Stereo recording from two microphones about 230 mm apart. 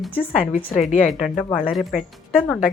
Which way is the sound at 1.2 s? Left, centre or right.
Centre.